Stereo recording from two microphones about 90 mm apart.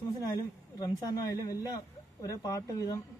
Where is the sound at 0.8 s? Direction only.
45° left (ahead or behind).